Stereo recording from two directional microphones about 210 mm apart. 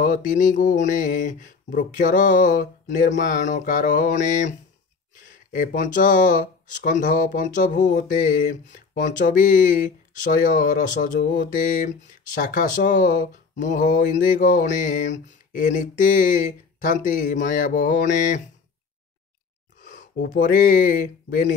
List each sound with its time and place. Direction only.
0.0 s speech: 40° left (ahead or behind)
19.8 s a sound: 35° left (ahead or behind)
20.2 s speech: 40° left (ahead or behind)